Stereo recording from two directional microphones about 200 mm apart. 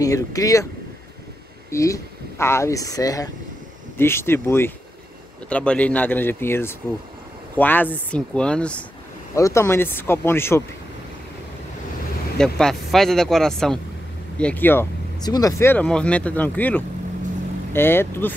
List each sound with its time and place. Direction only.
0.0 s speech: 15° left (ahead or behind)
1.7 s speech: 15° left (ahead or behind)
12.4 s speech: 5° left (ahead or behind)